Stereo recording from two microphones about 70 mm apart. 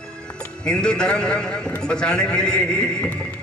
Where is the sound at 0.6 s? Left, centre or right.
Centre.